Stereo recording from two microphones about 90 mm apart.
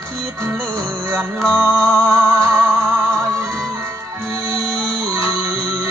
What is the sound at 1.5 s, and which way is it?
Music, 15° right (ahead or behind).